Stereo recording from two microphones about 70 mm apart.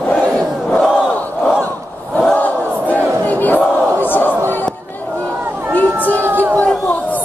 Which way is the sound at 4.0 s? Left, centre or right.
Left.